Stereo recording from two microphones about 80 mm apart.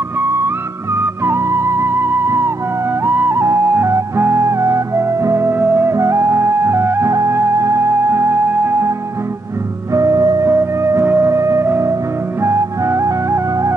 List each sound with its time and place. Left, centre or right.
1.0 s music: right
9.9 s music: right